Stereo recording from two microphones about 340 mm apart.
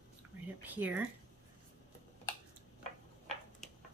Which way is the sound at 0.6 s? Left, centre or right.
Centre.